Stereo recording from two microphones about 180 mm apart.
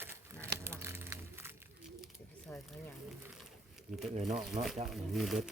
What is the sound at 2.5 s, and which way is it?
Speech, 10° left (ahead or behind).